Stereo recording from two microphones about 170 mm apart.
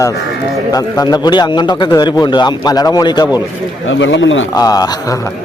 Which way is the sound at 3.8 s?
90° left.